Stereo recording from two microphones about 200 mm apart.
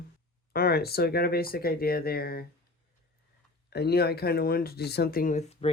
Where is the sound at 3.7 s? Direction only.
50° left (ahead or behind).